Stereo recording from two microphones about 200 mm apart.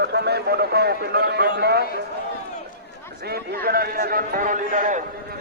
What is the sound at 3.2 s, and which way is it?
A man's voice, 50° right (ahead or behind).